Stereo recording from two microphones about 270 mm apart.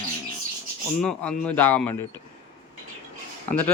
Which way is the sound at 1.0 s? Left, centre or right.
Centre.